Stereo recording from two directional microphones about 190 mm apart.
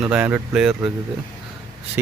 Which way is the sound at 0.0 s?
5° right (ahead or behind).